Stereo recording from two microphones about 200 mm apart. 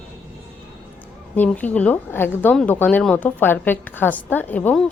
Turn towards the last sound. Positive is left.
turn(degrees=5)  # may be behind; listen again after turning